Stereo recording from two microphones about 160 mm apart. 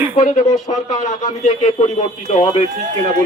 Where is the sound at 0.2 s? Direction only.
50° left (ahead or behind).